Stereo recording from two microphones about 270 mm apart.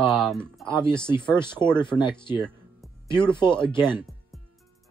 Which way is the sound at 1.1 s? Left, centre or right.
Centre.